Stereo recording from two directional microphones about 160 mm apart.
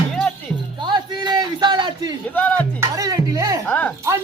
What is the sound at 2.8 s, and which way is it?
Music, 20° right (ahead or behind).